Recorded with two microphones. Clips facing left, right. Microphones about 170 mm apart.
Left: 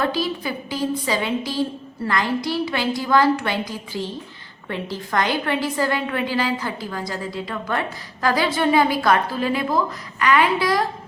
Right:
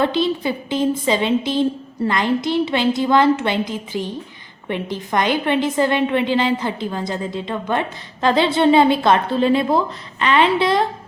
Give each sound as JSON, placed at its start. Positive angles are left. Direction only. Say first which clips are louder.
{"t": 0.0, "sound": "a woman's voice", "louder": "right 5 dB", "side_deg": -25}